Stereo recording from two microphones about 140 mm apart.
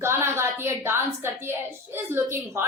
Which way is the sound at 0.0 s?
20° right (ahead or behind).